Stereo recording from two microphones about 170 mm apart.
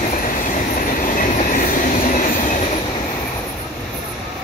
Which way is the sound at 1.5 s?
55° left (ahead or behind).